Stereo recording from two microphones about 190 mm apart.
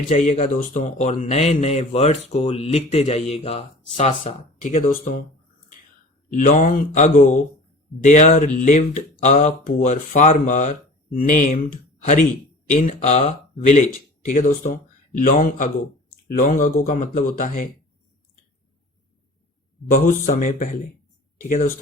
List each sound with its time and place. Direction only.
0.1 s a man's voice: 40° left (ahead or behind)
6.3 s a man's voice: 45° left (ahead or behind)
12.6 s speech: 40° left (ahead or behind)
19.9 s speech: 45° left (ahead or behind)